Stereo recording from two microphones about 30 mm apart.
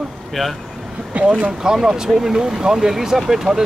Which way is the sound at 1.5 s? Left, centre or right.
Centre.